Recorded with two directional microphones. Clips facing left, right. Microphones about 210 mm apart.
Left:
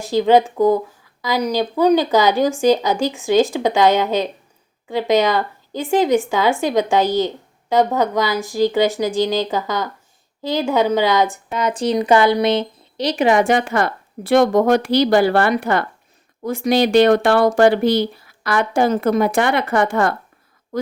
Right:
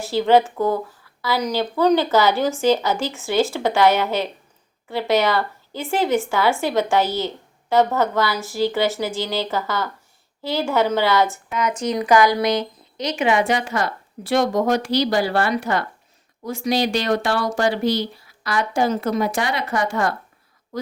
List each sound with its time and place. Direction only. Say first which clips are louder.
0.0 s speech: left 2 dB; 15° left (ahead or behind)
11.5 s speech: left 4 dB; 30° left (ahead or behind); by 20.1 s 55° left (ahead or behind)